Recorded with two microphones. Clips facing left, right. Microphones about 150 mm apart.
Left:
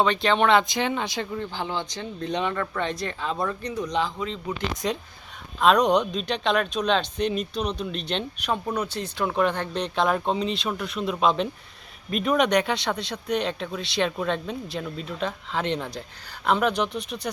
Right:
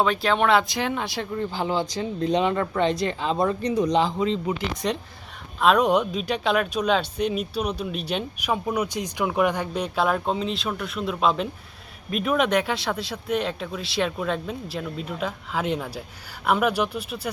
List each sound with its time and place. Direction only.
0.0 s speech: centre (ahead or behind)
2.3 s speech: 30° right (ahead or behind)
4.7 s speech: centre (ahead or behind)